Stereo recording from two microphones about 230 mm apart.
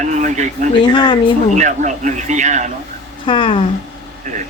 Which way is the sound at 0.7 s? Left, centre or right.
Centre.